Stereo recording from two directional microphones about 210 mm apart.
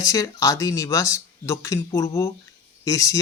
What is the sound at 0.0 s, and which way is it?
Speech, 15° left (ahead or behind).